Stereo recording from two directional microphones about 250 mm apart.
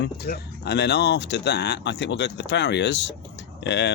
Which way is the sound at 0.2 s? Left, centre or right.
Left.